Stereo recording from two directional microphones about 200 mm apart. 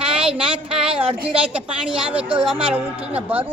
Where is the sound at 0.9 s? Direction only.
25° right (ahead or behind).